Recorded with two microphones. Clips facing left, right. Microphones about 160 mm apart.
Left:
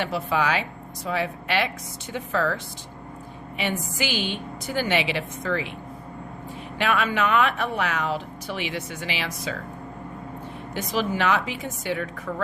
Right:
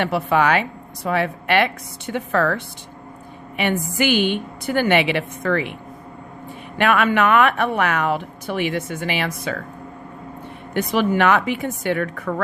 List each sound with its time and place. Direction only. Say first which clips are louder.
0.0 s speech: right 6 dB; 60° right (ahead or behind)
3.6 s speech: right 7 dB; 60° right (ahead or behind)
6.7 s speech: right 6 dB; 60° right (ahead or behind)
10.8 s speech: right 7 dB; 60° right (ahead or behind)